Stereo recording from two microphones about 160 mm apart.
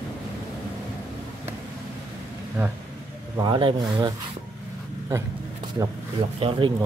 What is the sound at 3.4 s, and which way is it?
Speech, 30° right (ahead or behind).